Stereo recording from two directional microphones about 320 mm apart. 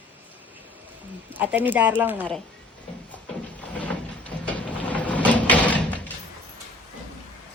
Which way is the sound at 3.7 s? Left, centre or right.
Centre.